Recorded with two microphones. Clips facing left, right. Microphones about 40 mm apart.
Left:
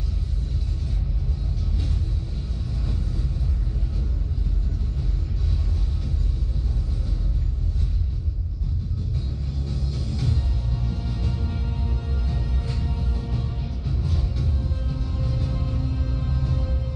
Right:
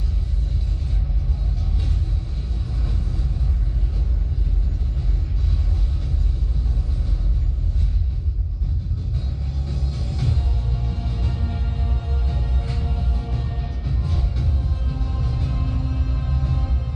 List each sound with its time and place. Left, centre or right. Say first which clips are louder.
9.7 s music: even; centre